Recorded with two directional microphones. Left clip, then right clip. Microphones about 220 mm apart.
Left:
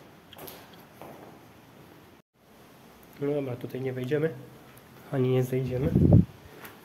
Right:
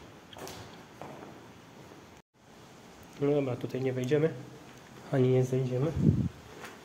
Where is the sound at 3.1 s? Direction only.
Centre (ahead or behind).